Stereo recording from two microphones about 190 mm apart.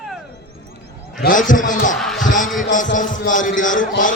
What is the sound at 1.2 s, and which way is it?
Speech, 45° left (ahead or behind).